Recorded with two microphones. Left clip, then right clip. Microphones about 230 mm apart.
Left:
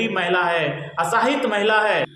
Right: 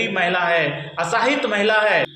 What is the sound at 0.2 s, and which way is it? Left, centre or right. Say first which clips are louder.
A man's voice: right 2 dB; centre.